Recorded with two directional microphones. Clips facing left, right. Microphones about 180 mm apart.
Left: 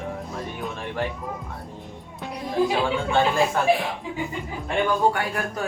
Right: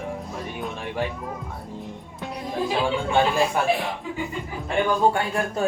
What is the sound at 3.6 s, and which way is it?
Speech, 10° right (ahead or behind).